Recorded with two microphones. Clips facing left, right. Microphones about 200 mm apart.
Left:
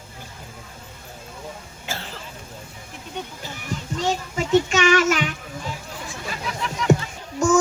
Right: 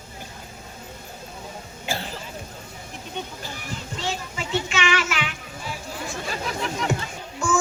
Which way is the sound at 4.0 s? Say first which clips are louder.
Left 7 dB; 45° left (ahead or behind).